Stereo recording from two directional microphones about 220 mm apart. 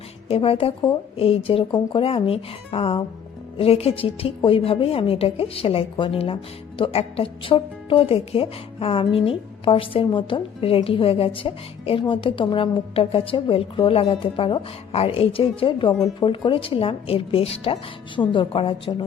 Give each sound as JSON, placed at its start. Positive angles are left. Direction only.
{"t": 0.3, "sound": "a woman's voice", "side_deg": 25}